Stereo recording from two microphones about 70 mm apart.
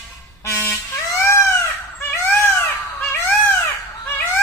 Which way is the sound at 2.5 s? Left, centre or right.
Left.